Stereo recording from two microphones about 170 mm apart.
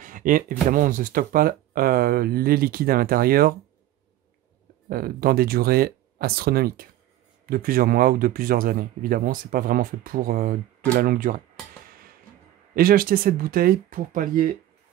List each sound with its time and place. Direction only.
0.0 s speech: 50° right (ahead or behind)
4.8 s speech: 60° right (ahead or behind)
12.7 s speech: 60° right (ahead or behind)